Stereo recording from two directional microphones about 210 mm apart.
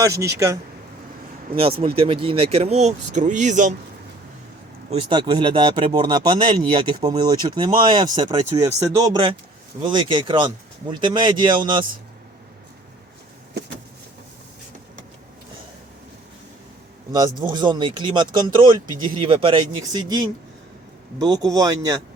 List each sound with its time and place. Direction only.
0.0 s a man's voice: 15° right (ahead or behind)
2.0 s speech: 25° right (ahead or behind)
4.9 s speech: 25° right (ahead or behind)
17.1 s a man's voice: 20° right (ahead or behind)